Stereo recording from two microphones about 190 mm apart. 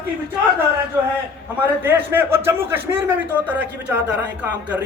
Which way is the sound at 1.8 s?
10° right (ahead or behind).